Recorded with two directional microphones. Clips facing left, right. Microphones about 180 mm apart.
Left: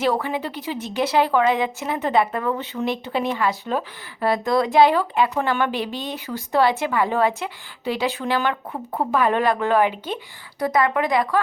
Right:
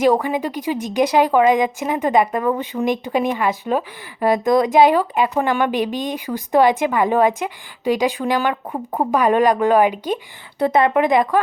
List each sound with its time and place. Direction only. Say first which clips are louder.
0.0 s a woman's voice: right 5 dB; 15° right (ahead or behind)
10.6 s speech: right 5 dB; 25° right (ahead or behind)